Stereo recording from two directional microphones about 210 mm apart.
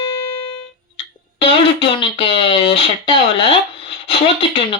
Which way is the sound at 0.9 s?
25° left (ahead or behind).